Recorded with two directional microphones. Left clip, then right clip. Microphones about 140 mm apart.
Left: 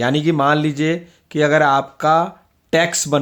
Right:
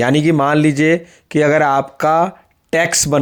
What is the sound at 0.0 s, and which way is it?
Speech, 45° right (ahead or behind).